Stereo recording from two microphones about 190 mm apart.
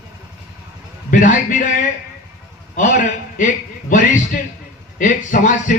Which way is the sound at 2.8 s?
45° left (ahead or behind).